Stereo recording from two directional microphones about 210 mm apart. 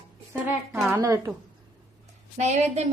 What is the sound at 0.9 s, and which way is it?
Speech, 15° right (ahead or behind).